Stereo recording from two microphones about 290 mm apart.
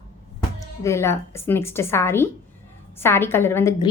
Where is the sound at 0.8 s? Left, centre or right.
Centre.